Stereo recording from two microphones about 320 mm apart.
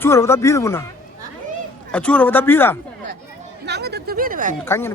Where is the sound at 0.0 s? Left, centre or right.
Centre.